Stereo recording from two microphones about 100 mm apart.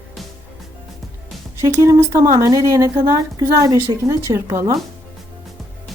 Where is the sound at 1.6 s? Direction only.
30° right (ahead or behind).